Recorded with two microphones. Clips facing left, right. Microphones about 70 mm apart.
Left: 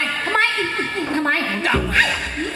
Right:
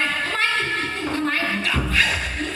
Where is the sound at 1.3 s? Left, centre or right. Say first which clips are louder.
Left 4 dB; left.